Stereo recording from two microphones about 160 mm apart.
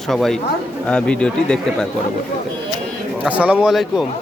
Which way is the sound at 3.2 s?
10° right (ahead or behind).